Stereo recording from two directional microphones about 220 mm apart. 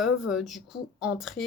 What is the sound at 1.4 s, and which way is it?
Speech, 50° left (ahead or behind).